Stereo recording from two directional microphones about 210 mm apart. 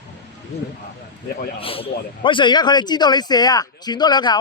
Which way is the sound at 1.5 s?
25° left (ahead or behind).